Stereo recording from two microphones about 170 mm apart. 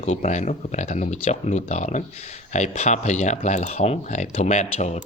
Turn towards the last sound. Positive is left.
turn(degrees=40)  # may be behind; listen again after turning